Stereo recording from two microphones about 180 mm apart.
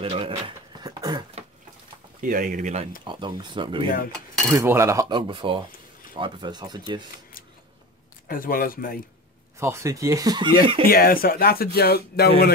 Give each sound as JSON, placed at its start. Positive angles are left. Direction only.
{"t": 0.0, "sound": "a sound", "side_deg": -30}
{"t": 2.2, "sound": "speech", "side_deg": -50}
{"t": 3.1, "sound": "speech", "side_deg": -25}
{"t": 4.6, "sound": "speech", "side_deg": -15}
{"t": 8.3, "sound": "speech", "side_deg": 55}
{"t": 9.6, "sound": "speech", "side_deg": -15}
{"t": 10.9, "sound": "speech", "side_deg": 55}